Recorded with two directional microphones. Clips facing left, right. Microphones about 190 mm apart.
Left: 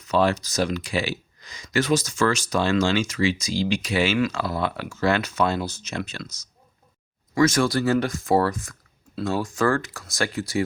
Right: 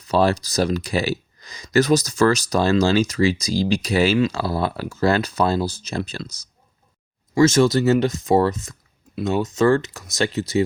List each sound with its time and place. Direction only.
0.0 s speech: 35° right (ahead or behind)